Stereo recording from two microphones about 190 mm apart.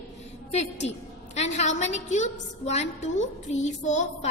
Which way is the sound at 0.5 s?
35° left (ahead or behind).